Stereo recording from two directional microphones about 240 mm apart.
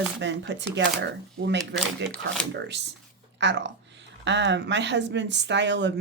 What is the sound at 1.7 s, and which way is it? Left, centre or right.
Speech, centre.